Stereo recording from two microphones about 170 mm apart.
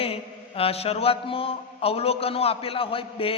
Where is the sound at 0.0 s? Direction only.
35° left (ahead or behind).